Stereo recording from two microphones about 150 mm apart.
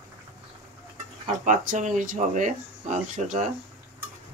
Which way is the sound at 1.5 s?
55° right (ahead or behind).